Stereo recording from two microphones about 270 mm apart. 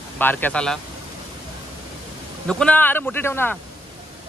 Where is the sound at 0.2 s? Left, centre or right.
Centre.